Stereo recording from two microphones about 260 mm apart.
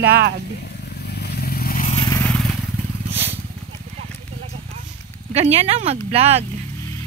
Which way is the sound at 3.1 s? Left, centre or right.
Right.